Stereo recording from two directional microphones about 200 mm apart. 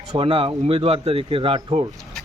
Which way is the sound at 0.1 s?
25° right (ahead or behind).